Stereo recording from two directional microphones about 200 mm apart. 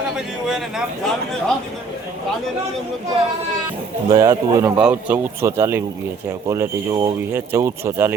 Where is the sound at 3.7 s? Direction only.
15° right (ahead or behind).